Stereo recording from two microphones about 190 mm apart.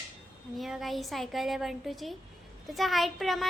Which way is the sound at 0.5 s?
Centre (ahead or behind).